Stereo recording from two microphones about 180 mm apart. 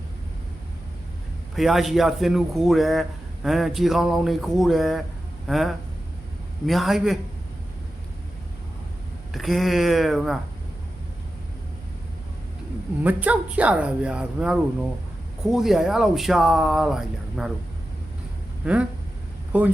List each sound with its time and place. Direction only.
1.5 s a man's voice: centre (ahead or behind)
9.3 s a man's voice: centre (ahead or behind)
13.0 s a man's voice: 10° right (ahead or behind)
18.6 s speech: 5° right (ahead or behind)